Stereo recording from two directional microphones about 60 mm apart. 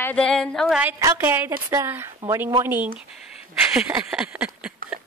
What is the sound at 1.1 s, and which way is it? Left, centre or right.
Speech, right.